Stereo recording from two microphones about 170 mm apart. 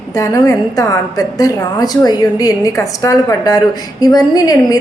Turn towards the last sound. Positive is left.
turn(degrees=20)  # may be behind; listen again after turning